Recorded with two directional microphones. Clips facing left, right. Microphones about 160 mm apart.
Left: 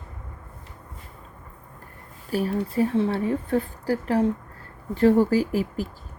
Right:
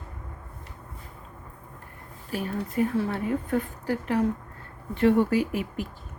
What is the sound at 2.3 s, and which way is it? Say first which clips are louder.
A woman's voice: left 5 dB; 35° left (ahead or behind).